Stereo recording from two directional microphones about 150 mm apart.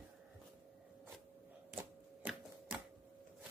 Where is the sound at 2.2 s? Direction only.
10° right (ahead or behind).